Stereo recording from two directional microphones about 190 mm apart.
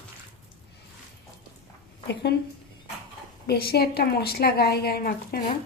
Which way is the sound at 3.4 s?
55° left (ahead or behind).